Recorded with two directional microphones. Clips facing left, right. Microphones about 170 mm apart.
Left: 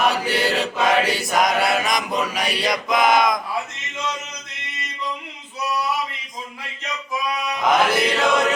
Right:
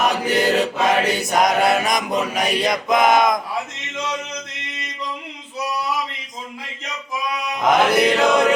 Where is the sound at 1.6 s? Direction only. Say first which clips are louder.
Right 3 dB; 45° right (ahead or behind).